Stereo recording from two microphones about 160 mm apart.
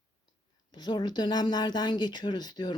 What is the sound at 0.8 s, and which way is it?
Speech, 30° left (ahead or behind).